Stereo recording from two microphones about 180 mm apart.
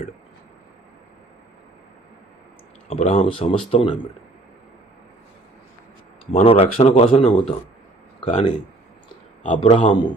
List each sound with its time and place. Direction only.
2.9 s speech: 40° left (ahead or behind)
6.3 s speech: 30° left (ahead or behind)
9.6 s a man's voice: 25° left (ahead or behind)